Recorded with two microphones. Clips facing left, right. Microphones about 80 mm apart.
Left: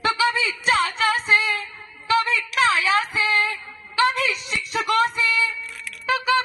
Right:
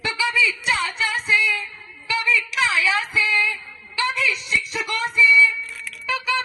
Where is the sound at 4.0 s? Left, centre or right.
Left.